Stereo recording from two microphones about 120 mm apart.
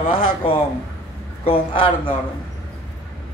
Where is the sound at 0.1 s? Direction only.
50° left (ahead or behind).